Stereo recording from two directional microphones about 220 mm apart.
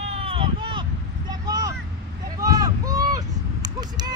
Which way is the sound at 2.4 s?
15° right (ahead or behind).